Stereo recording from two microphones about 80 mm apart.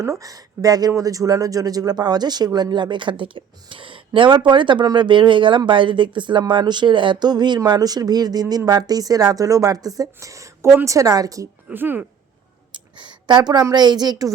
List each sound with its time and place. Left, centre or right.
0.0 s speech: right
6.5 s speech: right
11.7 s speech: right
12.7 s a woman's voice: right